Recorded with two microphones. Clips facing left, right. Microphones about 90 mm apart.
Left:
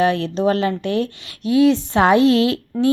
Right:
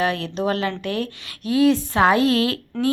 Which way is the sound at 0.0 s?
30° left (ahead or behind).